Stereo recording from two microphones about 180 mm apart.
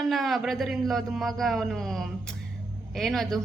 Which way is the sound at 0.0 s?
Centre (ahead or behind).